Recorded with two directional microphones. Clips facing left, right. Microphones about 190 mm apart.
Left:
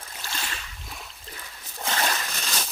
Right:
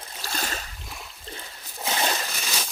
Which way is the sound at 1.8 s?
10° right (ahead or behind).